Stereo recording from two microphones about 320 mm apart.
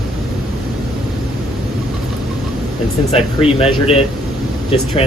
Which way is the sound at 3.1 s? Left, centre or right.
Centre.